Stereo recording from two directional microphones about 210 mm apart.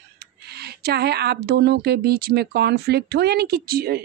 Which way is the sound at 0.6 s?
50° right (ahead or behind).